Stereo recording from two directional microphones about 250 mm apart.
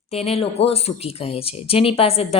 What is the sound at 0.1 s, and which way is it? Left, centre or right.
A woman's voice, left.